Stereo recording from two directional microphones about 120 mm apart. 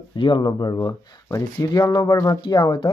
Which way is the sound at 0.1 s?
40° left (ahead or behind).